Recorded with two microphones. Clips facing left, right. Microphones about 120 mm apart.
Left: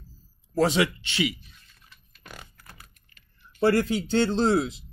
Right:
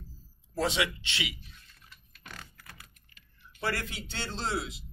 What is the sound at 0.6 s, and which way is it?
Speech, 45° left (ahead or behind).